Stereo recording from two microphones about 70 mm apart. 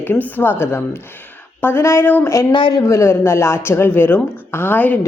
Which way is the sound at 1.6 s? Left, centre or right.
Left.